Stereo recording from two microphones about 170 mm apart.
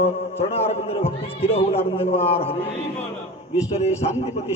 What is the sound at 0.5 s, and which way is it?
A man's voice, 35° left (ahead or behind).